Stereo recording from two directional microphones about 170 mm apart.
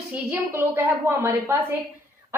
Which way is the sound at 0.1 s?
10° right (ahead or behind).